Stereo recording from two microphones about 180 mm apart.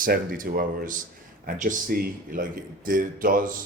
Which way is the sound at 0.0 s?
50° right (ahead or behind).